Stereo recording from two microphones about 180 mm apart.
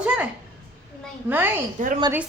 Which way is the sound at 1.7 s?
45° right (ahead or behind).